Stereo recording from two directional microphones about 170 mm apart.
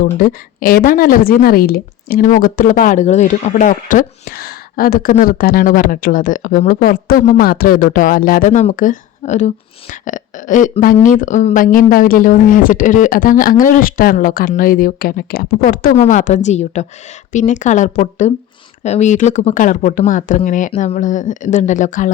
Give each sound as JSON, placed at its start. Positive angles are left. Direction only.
{"t": 0.0, "sound": "a woman's voice", "side_deg": 55}
{"t": 16.0, "sound": "speech", "side_deg": 45}